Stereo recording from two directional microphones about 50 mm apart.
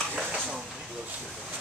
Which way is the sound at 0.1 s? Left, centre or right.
Right.